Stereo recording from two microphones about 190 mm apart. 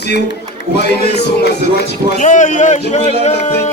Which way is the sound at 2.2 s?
40° left (ahead or behind).